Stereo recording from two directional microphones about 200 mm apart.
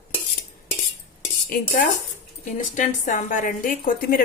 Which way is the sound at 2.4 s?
40° left (ahead or behind).